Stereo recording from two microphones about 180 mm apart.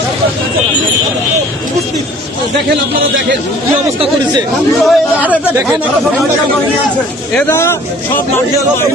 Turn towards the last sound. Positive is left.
turn(degrees=15)  # may be behind; listen again after turning